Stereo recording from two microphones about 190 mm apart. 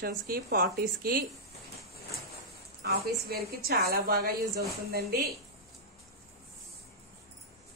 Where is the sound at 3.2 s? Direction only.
55° right (ahead or behind).